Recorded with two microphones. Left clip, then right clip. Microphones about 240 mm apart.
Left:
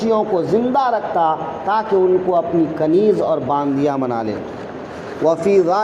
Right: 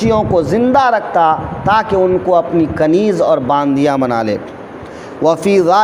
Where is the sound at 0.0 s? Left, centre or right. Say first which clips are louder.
Right 4 dB; right.